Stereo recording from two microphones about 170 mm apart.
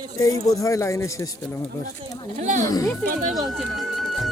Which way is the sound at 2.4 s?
45° right (ahead or behind).